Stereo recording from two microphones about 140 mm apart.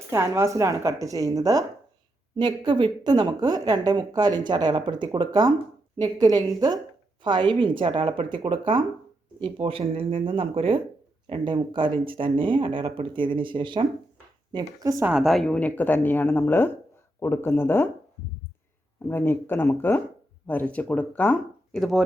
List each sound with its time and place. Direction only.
0.1 s a woman's voice: 20° right (ahead or behind); by 13.8 s 35° right (ahead or behind)
14.5 s a woman's voice: 25° right (ahead or behind)
15.0 s a woman's voice: centre (ahead or behind); by 17.8 s 15° left (ahead or behind)
19.0 s a woman's voice: 15° left (ahead or behind)
21.7 s speech: centre (ahead or behind)